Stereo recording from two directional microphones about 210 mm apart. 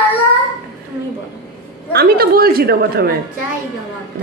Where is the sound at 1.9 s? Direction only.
45° right (ahead or behind).